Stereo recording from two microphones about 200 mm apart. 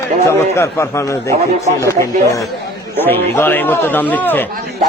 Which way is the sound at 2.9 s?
10° left (ahead or behind).